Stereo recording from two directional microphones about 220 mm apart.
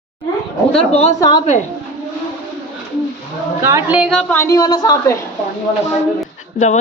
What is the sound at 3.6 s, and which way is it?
Speech, 10° right (ahead or behind).